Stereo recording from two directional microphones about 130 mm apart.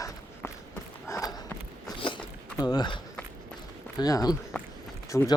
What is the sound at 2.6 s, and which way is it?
Speech, 30° left (ahead or behind).